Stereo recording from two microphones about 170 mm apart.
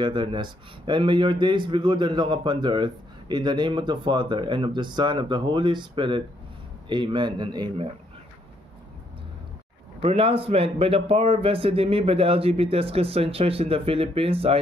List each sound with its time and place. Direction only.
0.0 s speech: 30° right (ahead or behind)
10.0 s a man's voice: 35° right (ahead or behind)